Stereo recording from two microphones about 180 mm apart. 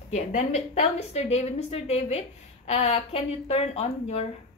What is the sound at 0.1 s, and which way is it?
A woman's voice, 40° left (ahead or behind).